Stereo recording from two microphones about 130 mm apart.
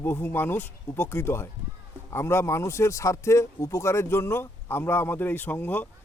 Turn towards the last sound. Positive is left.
turn(degrees=15)  # may be behind; listen again after turning